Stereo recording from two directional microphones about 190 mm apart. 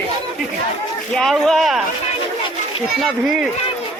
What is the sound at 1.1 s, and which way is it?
Speech, centre (ahead or behind).